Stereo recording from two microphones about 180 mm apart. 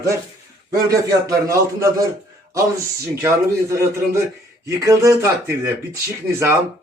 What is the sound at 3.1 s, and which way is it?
A man's voice, 15° right (ahead or behind).